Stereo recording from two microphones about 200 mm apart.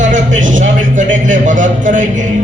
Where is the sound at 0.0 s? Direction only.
40° right (ahead or behind).